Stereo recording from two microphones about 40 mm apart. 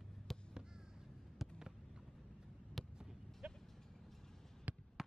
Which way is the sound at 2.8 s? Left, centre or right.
Centre.